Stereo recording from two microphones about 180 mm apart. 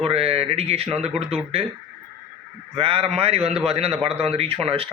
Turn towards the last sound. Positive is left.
turn(degrees=-35)  # may be behind; listen again after turning